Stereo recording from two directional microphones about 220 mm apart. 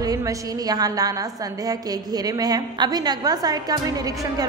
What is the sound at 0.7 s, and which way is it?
Speech, 15° right (ahead or behind).